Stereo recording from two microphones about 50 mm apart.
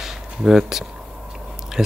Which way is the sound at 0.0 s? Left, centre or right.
Centre.